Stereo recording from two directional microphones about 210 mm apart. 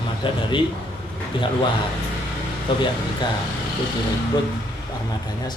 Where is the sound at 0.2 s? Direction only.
20° left (ahead or behind).